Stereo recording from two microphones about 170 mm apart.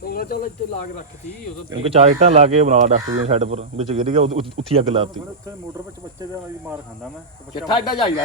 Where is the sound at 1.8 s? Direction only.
40° right (ahead or behind).